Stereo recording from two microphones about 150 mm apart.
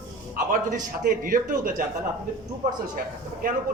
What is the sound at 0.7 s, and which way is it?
A man's voice, 70° right (ahead or behind).